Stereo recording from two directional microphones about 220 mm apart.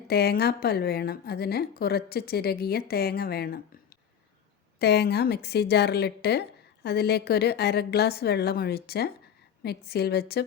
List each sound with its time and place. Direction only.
0.1 s a woman's voice: 45° left (ahead or behind)